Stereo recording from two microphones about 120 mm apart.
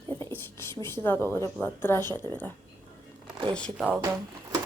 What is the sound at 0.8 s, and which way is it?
Speech, 20° left (ahead or behind).